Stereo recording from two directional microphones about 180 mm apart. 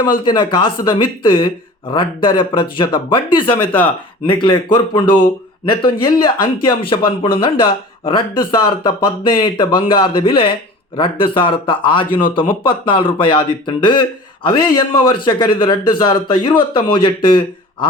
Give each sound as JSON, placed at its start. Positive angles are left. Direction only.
{"t": 0.3, "sound": "speech", "side_deg": 25}